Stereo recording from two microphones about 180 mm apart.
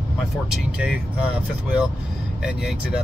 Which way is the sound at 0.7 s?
5° right (ahead or behind).